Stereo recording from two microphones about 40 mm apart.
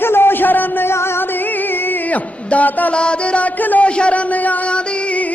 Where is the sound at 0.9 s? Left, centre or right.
Left.